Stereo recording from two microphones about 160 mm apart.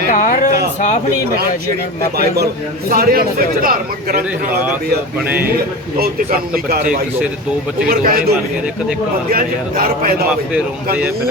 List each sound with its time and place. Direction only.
0.1 s speech: 55° left (ahead or behind)
2.1 s a man's voice: 80° right
2.9 s speech: 65° right (ahead or behind)
6.0 s speech: 70° right (ahead or behind)
9.3 s speech: 65° right (ahead or behind)